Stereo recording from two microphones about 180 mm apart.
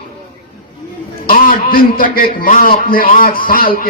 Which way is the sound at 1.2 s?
50° left (ahead or behind).